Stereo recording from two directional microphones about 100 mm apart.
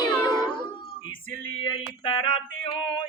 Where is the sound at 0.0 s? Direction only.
40° left (ahead or behind).